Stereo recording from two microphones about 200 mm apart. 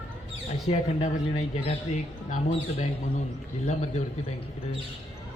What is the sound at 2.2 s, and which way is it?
Speech, 35° left (ahead or behind).